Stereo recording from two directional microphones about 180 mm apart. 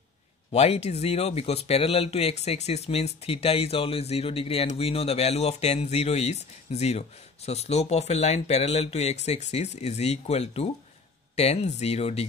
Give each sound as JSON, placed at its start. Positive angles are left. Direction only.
{"t": 0.5, "sound": "speech", "side_deg": 35}